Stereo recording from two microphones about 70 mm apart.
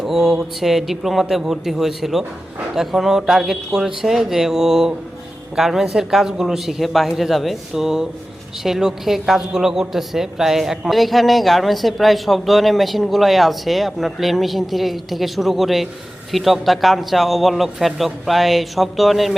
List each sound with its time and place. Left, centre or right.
0.0 s a woman's voice: centre